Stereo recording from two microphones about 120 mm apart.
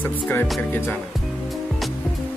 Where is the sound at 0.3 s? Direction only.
15° left (ahead or behind).